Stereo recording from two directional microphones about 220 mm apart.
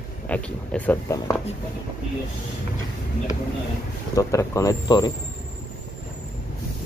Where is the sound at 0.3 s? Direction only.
5° left (ahead or behind).